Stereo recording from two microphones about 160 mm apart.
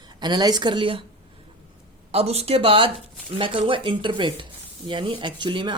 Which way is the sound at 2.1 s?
40° right (ahead or behind).